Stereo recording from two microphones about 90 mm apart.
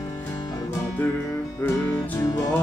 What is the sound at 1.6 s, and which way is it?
Music, 25° left (ahead or behind).